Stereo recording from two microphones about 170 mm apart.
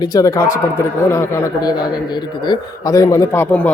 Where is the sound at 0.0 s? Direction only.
20° left (ahead or behind).